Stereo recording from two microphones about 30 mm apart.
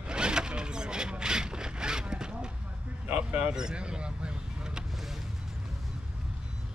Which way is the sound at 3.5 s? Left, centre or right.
Right.